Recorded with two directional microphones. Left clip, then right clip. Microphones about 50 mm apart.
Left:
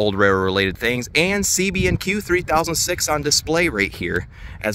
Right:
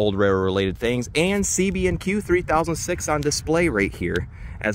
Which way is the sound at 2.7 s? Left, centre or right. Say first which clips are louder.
Left 4 dB; left.